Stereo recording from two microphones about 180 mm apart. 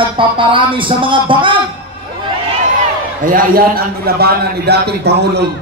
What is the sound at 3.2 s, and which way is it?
A man's voice, 50° right (ahead or behind).